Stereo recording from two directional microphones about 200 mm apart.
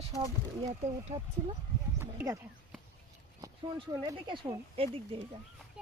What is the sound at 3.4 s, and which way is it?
Speech, 20° right (ahead or behind).